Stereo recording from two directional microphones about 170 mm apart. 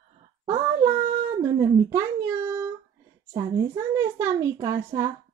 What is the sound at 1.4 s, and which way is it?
Speech, 20° right (ahead or behind).